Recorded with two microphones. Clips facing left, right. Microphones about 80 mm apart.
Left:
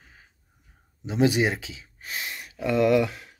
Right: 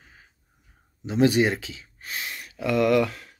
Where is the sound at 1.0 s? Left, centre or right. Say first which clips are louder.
Right 2 dB; centre.